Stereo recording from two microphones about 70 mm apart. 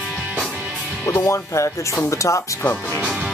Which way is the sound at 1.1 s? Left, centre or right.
Left.